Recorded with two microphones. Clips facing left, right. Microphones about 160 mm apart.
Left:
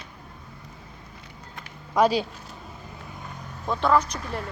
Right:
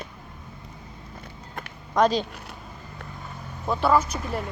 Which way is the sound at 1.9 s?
10° left (ahead or behind).